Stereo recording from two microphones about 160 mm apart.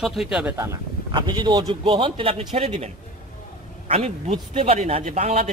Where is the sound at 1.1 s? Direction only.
25° right (ahead or behind).